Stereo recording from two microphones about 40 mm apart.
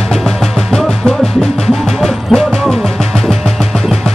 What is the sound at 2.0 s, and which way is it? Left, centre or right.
Music, centre.